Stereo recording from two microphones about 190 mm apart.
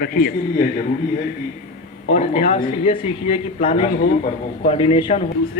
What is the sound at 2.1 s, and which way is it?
Speech, 35° left (ahead or behind).